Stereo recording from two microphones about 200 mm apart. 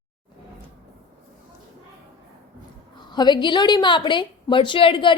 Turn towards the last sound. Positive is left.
turn(degrees=25)  # may be behind; listen again after turning